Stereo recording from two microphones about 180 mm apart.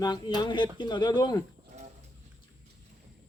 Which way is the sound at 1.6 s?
40° right (ahead or behind).